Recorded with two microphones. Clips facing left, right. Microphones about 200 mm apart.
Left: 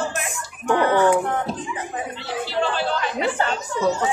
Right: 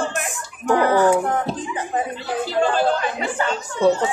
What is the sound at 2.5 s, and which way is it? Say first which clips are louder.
Speech: right 5 dB; 45° right (ahead or behind).